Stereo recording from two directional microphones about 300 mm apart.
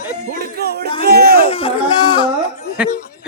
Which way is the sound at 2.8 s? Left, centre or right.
Centre.